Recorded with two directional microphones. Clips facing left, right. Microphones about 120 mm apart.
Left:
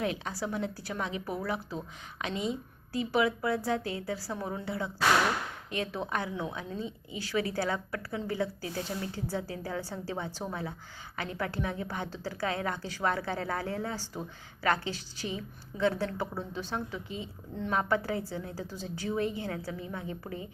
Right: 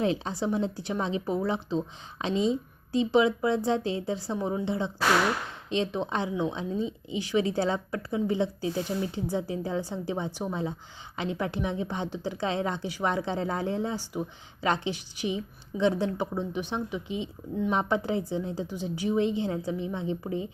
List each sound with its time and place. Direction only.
0.0 s a woman's voice: 30° right (ahead or behind)